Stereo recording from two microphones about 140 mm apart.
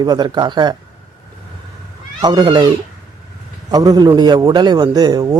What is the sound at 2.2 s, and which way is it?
Speech, 30° right (ahead or behind).